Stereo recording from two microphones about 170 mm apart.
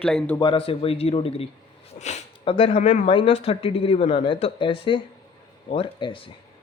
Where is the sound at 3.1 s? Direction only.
35° left (ahead or behind).